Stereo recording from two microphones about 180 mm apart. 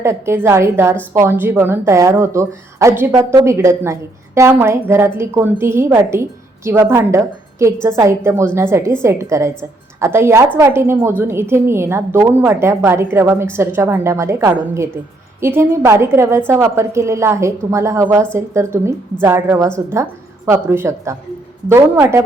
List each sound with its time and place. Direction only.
0.0 s a woman's voice: 15° right (ahead or behind)